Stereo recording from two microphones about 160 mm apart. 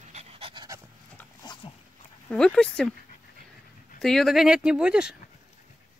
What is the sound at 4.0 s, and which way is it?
Speech, centre (ahead or behind).